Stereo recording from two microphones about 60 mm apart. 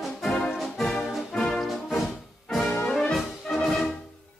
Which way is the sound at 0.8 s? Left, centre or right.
Centre.